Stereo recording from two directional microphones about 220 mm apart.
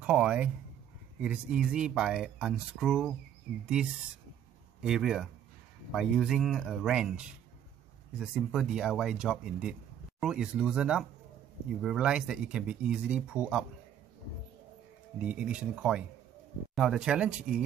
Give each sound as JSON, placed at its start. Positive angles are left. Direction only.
{"t": 0.0, "sound": "speech", "side_deg": -5}
{"t": 15.1, "sound": "speech", "side_deg": -5}